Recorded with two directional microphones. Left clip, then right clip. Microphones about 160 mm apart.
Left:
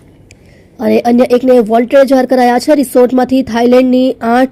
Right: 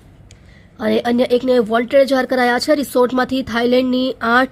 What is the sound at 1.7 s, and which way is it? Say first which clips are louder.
A woman's voice: left 6 dB; 15° left (ahead or behind).